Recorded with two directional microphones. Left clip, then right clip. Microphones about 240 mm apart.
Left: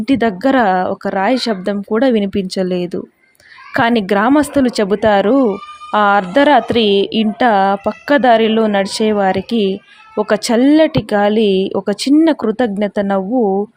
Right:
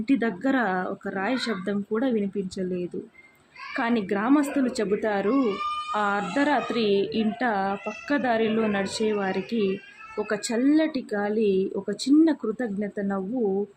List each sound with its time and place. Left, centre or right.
0.0 s a woman's voice: left